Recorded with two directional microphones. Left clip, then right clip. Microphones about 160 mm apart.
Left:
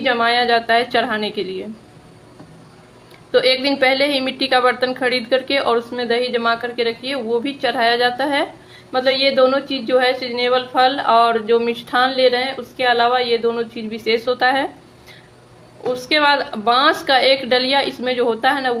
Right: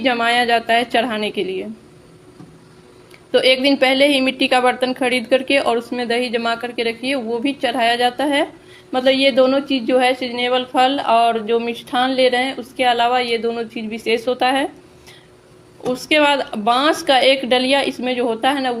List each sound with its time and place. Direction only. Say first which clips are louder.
0.0 s a woman's voice: even; 40° right (ahead or behind)
3.3 s a woman's voice: right 1 dB; 35° right (ahead or behind)
8.9 s a woman's voice: right 1 dB; 40° right (ahead or behind)
15.9 s a woman's voice: even; 40° right (ahead or behind)